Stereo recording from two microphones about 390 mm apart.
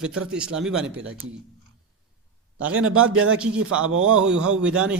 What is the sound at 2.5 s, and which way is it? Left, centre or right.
A man's voice, right.